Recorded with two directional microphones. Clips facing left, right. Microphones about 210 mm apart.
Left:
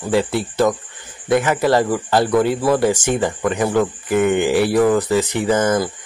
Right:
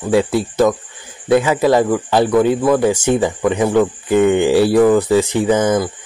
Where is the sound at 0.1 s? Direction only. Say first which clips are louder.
Right 3 dB; 15° right (ahead or behind).